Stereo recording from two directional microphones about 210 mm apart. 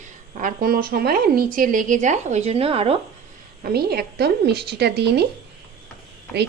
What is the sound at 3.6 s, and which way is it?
A woman's voice, 45° right (ahead or behind).